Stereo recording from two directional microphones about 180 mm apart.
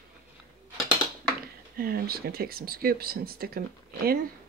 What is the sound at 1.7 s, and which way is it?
Speech, 55° right (ahead or behind).